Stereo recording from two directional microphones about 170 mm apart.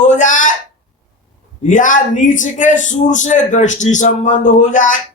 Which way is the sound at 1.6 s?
50° left (ahead or behind).